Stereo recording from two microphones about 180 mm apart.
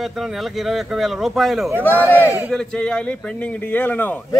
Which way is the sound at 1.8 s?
10° left (ahead or behind).